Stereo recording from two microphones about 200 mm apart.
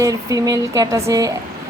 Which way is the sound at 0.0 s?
15° right (ahead or behind).